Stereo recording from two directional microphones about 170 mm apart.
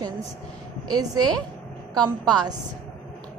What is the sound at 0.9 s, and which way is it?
Speech, 25° right (ahead or behind).